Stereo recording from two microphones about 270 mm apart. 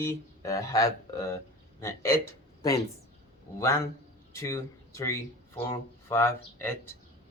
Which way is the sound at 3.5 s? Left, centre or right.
Centre.